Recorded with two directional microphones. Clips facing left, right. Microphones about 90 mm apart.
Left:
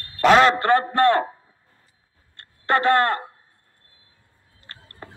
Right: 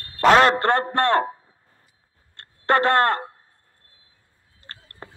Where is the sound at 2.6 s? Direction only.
55° right (ahead or behind).